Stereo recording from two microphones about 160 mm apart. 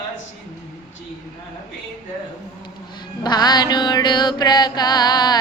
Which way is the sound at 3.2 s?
25° left (ahead or behind).